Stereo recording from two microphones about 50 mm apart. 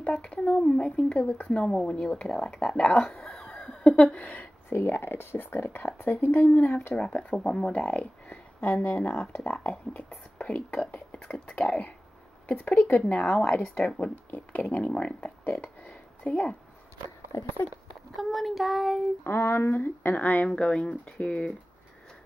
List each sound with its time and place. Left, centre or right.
0.0 s a woman's voice: left
3.2 s a sound: centre
3.8 s a woman's voice: left
4.7 s speech: left
7.0 s speech: centre
12.4 s a woman's voice: left
15.0 s a woman's voice: centre
15.4 s a sound: left
16.3 s a woman's voice: left
18.1 s child singing: centre
19.2 s speech: left
19.7 s speech: left
20.4 s a woman's voice: left